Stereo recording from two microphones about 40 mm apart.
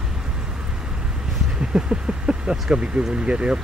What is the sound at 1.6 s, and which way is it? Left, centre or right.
Speech, right.